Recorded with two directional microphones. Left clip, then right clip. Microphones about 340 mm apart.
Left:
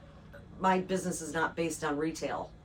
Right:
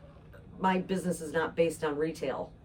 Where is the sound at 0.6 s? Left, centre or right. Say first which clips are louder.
Left 1 dB; centre.